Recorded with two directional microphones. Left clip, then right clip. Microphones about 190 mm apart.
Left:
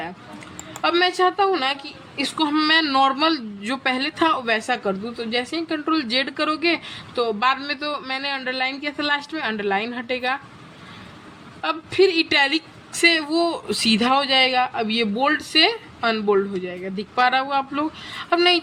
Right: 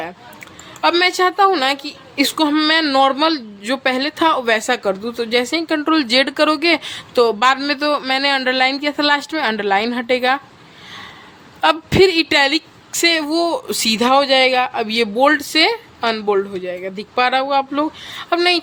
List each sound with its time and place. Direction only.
0.8 s a woman's voice: 30° right (ahead or behind)
2.5 s a woman's voice: 20° right (ahead or behind)
11.6 s a woman's voice: 35° right (ahead or behind)